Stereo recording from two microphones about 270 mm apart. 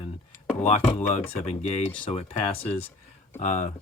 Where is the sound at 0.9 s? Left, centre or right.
Left.